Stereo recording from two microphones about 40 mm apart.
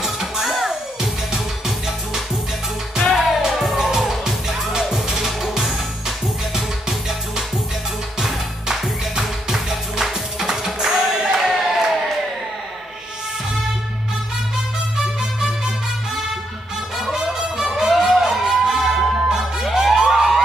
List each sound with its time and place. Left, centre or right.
0.0 s music: centre
3.0 s music: centre
11.4 s a sound: centre
16.9 s music: centre
20.1 s emergency vehicle: centre